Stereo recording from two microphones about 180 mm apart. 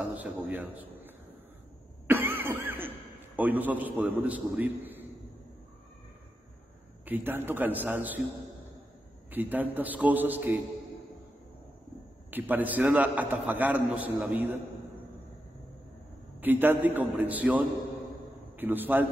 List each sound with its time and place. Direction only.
0.1 s a man's voice: 10° right (ahead or behind)
2.0 s cough: 10° right (ahead or behind)
3.3 s a man's voice: 10° right (ahead or behind)
7.1 s a man's voice: 10° right (ahead or behind)
9.3 s a man's voice: 10° right (ahead or behind)
12.3 s a man's voice: 10° right (ahead or behind)
16.3 s a man's voice: 10° right (ahead or behind)